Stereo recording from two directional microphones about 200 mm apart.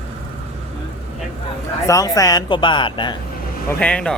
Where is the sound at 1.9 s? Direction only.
15° left (ahead or behind).